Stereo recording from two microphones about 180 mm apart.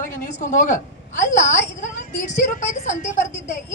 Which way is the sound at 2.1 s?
45° left (ahead or behind).